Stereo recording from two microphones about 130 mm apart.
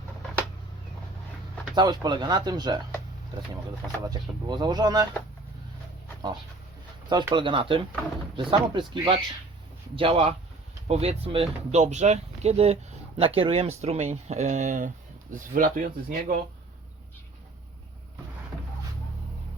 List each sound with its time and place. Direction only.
1.7 s speech: 35° right (ahead or behind)
4.0 s speech: 35° right (ahead or behind)
7.1 s speech: 35° right (ahead or behind)
11.7 s speech: 60° right (ahead or behind)
15.3 s speech: 90° right